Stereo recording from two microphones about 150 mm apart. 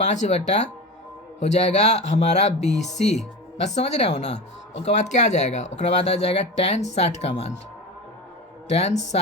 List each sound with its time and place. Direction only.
0.0 s speech: 50° left (ahead or behind)
8.7 s speech: 45° left (ahead or behind)